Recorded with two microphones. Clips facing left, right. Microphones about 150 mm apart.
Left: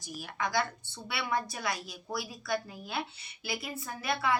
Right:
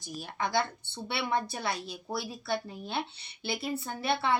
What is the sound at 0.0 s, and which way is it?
Speech, 30° right (ahead or behind).